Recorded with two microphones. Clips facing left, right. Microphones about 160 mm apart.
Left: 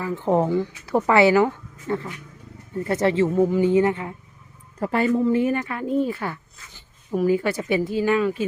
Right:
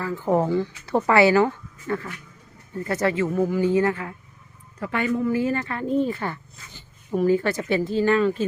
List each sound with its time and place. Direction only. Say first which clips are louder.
0.0 s speech: left 1 dB; 20° left (ahead or behind)
4.8 s speech: left 4 dB; 35° left (ahead or behind); by 8.4 s 10° left (ahead or behind)